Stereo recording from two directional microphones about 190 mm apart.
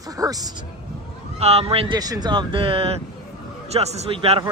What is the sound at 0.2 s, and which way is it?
Speech, 20° right (ahead or behind).